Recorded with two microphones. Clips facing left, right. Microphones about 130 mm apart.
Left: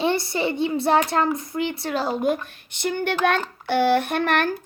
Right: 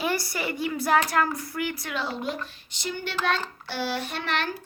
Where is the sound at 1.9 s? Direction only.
40° left (ahead or behind).